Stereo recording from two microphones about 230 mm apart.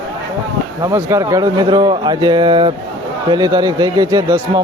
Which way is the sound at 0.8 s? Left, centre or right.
Centre.